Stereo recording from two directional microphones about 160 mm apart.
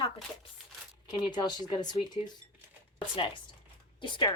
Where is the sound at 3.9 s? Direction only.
30° left (ahead or behind).